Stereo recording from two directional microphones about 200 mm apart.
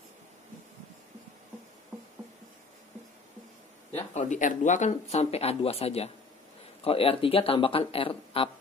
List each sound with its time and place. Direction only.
3.9 s speech: 35° left (ahead or behind)